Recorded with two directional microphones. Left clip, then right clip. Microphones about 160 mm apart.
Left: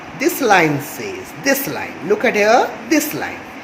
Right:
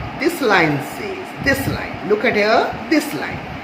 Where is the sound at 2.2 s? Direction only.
50° left (ahead or behind).